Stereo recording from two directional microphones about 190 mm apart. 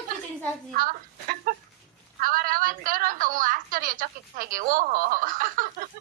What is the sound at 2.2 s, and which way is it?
A woman's voice, 50° right (ahead or behind).